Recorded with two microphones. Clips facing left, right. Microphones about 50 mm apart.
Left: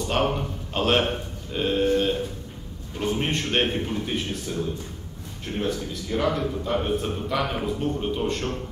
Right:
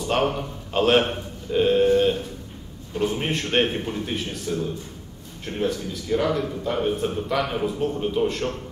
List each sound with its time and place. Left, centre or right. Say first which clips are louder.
0.1 s a man's voice: right 2 dB; centre